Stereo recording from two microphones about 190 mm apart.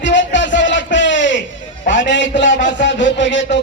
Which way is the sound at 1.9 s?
75° left (ahead or behind).